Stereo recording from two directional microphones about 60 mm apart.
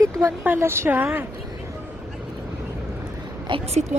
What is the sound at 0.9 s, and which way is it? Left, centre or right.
Speech, right.